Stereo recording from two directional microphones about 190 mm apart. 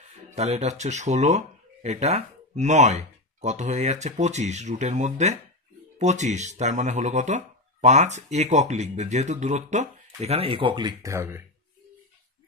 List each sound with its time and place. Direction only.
0.3 s speech: 35° right (ahead or behind); by 11.4 s 15° right (ahead or behind)